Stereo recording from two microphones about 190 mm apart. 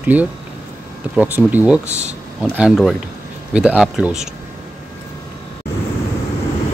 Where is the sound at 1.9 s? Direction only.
35° right (ahead or behind).